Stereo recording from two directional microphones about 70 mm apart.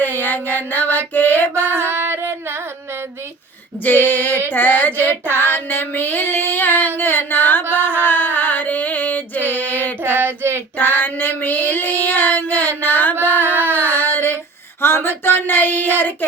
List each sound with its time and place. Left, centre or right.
0.0 s music: left
1.8 s music: right
3.8 s child singing: left
5.3 s female singing: left
7.7 s music: left
10.0 s child singing: right
10.8 s child singing: left
13.4 s a sound: right
13.8 s child singing: left
14.8 s a sound: left